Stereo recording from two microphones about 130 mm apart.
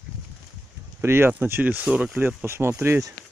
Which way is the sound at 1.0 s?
20° right (ahead or behind).